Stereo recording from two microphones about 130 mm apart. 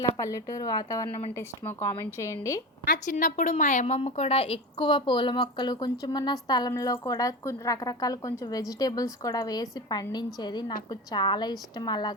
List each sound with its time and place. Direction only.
0.2 s speech: 25° left (ahead or behind)
1.4 s speech: 20° left (ahead or behind)
2.9 s a woman's voice: 90° left; by 12.1 s 35° left (ahead or behind)